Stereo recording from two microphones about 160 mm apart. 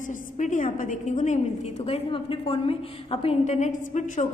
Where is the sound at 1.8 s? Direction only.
35° left (ahead or behind).